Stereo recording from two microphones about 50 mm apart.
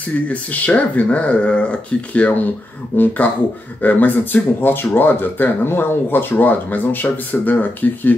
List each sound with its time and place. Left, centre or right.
0.3 s speech: left
2.9 s speech: left